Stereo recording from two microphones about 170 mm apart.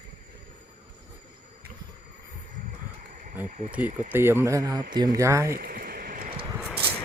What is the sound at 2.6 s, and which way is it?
Vehicle, 50° right (ahead or behind).